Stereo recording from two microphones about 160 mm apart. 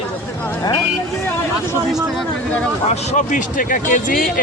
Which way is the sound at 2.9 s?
45° left (ahead or behind).